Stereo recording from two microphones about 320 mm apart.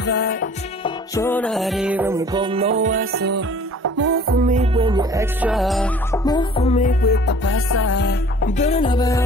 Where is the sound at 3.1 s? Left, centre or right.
Right; by 8.5 s left.